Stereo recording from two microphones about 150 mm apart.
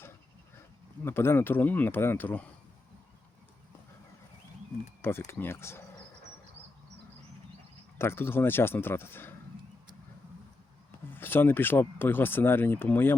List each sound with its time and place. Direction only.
1.0 s speech: 15° left (ahead or behind)
5.3 s speech: 15° left (ahead or behind)
7.9 s speech: 15° left (ahead or behind)
11.1 s speech: 15° left (ahead or behind)